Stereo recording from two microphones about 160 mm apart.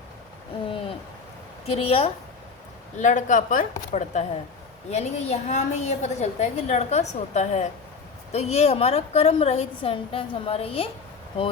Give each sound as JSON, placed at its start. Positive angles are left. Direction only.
{"t": 1.6, "sound": "a woman's voice", "side_deg": 40}
{"t": 3.0, "sound": "a woman's voice", "side_deg": 50}